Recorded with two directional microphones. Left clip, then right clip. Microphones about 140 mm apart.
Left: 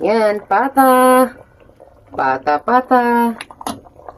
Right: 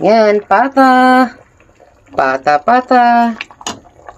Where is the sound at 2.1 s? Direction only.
90° right.